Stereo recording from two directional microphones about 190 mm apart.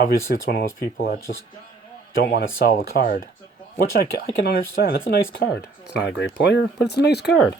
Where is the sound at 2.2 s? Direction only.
55° left (ahead or behind).